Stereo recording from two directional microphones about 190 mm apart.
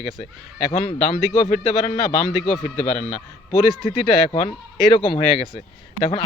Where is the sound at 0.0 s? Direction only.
35° left (ahead or behind).